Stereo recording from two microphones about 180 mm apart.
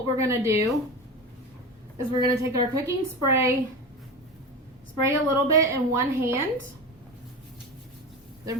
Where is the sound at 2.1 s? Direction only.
20° right (ahead or behind).